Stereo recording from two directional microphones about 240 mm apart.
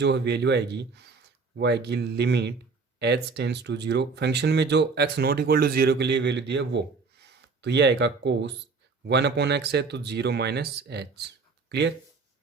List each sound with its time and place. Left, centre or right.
0.0 s speech: right